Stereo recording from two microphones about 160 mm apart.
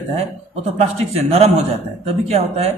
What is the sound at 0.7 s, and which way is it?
A man's voice, 40° right (ahead or behind).